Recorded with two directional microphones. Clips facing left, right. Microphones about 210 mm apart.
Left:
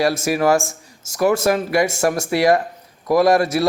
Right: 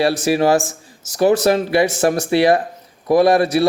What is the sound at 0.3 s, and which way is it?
A man's voice, 30° right (ahead or behind).